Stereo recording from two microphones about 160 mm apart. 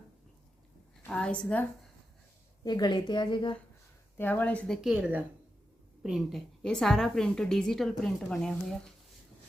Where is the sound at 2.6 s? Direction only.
25° left (ahead or behind).